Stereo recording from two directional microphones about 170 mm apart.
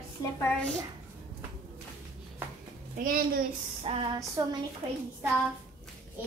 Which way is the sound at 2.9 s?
60° right (ahead or behind).